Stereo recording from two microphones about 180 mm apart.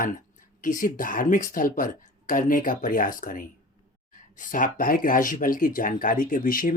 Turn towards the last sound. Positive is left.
turn(degrees=50)  # may be behind; listen again after turning